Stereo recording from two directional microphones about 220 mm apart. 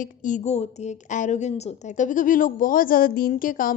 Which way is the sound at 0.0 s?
35° left (ahead or behind).